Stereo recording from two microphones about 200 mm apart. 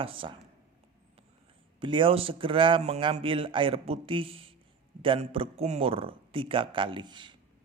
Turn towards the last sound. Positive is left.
turn(degrees=-25)  # may be behind; listen again after turning